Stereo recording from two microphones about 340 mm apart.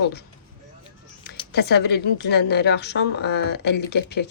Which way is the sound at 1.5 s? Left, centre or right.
Left.